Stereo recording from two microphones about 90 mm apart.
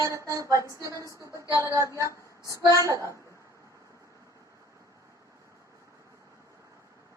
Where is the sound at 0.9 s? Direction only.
40° left (ahead or behind).